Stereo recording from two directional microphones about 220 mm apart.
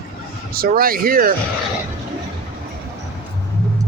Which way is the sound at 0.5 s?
40° right (ahead or behind).